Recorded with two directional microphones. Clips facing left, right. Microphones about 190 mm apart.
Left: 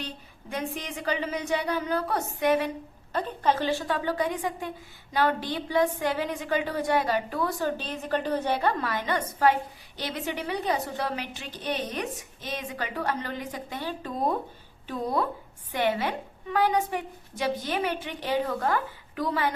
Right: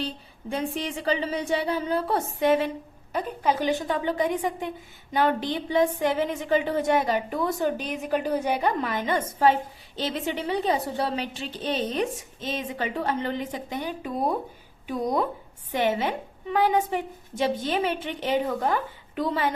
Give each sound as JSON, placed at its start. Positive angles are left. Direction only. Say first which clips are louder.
{"t": 0.5, "sound": "a woman's voice", "louder": "right 4 dB", "side_deg": -30}
{"t": 3.1, "sound": "a woman's voice", "louder": "even", "side_deg": -10}